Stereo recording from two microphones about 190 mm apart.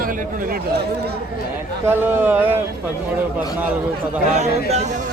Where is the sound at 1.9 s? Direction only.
10° right (ahead or behind).